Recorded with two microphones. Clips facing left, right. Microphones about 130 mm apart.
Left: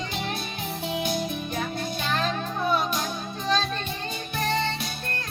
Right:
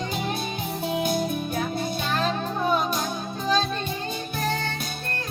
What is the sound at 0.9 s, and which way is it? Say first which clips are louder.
Music: right 3 dB; 45° right (ahead or behind).